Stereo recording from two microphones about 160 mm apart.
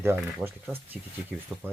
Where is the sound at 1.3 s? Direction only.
5° right (ahead or behind).